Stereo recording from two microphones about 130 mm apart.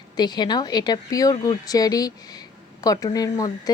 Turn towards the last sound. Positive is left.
turn(degrees=30)  # may be behind; listen again after turning